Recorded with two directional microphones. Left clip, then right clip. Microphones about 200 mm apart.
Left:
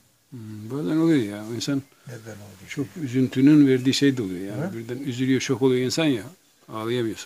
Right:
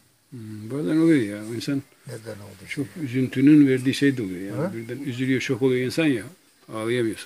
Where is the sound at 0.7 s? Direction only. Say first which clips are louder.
Right 2 dB; 5° left (ahead or behind).